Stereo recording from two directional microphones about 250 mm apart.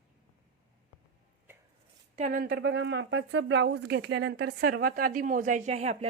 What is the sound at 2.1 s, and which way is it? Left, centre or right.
Speech, right.